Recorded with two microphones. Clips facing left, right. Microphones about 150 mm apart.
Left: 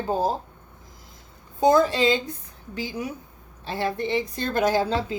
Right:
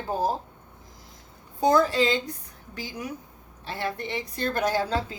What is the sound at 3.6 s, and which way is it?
A woman's voice, 30° left (ahead or behind).